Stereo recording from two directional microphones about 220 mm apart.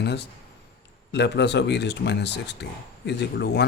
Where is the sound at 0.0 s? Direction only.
50° left (ahead or behind).